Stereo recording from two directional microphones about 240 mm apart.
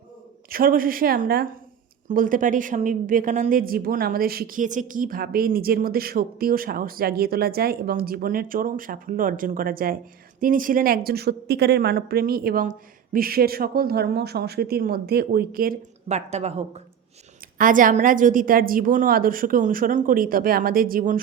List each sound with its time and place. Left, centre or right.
0.5 s a woman's voice: right